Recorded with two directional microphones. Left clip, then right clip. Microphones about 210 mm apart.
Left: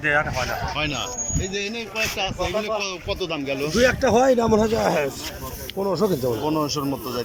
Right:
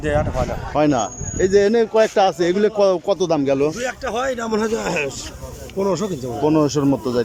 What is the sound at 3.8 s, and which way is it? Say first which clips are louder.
Speech: left 6 dB; 35° left (ahead or behind).